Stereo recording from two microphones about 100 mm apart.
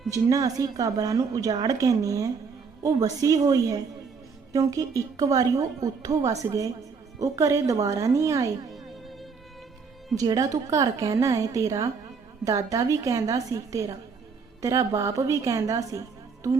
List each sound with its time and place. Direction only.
0.1 s a woman's voice: 35° right (ahead or behind)
10.2 s a woman's voice: 35° right (ahead or behind)